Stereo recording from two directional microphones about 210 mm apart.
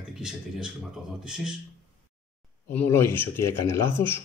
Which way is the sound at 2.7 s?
10° left (ahead or behind).